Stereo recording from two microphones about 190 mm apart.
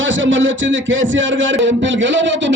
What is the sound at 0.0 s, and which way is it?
A man's voice, 85° right.